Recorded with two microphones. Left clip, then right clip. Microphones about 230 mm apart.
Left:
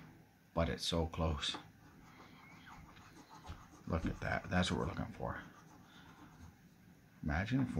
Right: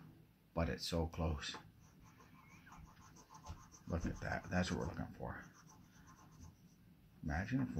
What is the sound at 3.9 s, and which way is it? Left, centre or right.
Speech, centre.